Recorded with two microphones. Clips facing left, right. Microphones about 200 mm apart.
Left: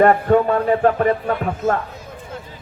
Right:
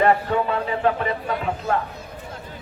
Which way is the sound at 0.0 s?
50° left (ahead or behind).